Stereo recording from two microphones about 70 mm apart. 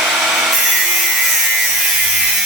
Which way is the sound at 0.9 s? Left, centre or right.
Centre.